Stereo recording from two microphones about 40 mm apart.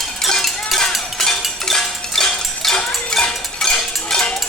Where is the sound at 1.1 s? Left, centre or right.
Centre.